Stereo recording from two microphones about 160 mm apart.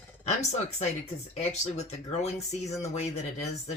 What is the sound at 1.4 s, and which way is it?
Speech, 45° left (ahead or behind).